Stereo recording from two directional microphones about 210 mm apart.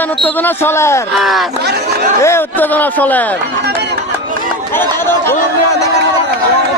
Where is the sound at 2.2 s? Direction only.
10° left (ahead or behind).